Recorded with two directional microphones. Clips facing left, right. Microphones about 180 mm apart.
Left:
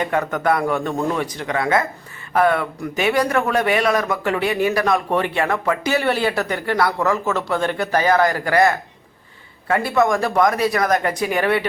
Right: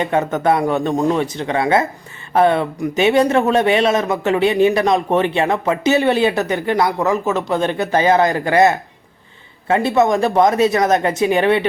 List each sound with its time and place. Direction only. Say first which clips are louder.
0.0 s speech: right 3 dB; 25° right (ahead or behind)